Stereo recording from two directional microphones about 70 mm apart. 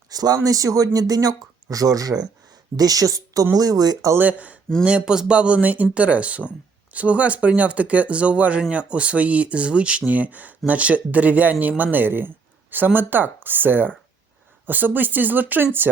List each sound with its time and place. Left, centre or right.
0.1 s speech: right
0.3 s speech: right
4.2 s a man's voice: right